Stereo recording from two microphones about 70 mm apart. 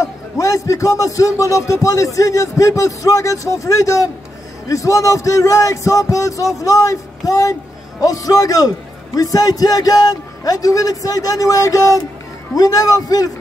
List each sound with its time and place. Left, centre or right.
0.0 s a man's voice: left